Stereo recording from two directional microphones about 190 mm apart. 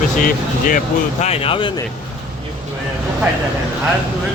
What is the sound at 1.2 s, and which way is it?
Speech, 30° left (ahead or behind).